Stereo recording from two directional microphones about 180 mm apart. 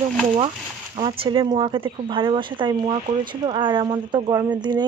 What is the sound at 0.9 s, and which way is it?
Speech, 30° right (ahead or behind).